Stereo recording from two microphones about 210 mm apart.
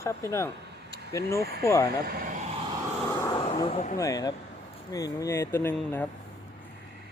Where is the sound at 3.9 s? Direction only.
15° left (ahead or behind).